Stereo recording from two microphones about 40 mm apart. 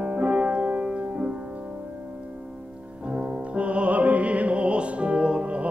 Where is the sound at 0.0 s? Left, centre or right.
Right.